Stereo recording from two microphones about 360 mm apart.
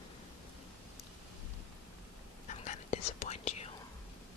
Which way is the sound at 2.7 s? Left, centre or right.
Centre.